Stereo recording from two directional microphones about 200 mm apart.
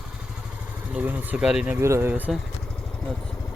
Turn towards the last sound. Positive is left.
turn(degrees=5)  # may be behind; listen again after turning